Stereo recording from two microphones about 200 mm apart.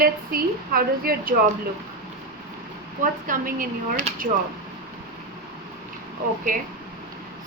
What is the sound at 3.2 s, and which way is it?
Speech, 40° right (ahead or behind).